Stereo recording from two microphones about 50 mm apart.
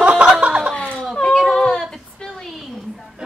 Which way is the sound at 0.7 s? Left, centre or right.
Left.